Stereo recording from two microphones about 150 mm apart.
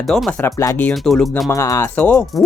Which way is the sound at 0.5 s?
20° left (ahead or behind).